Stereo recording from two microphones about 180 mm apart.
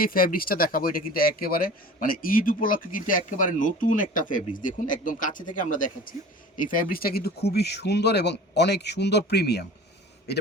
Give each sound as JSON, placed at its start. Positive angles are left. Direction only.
{"t": 0.0, "sound": "speech", "side_deg": 50}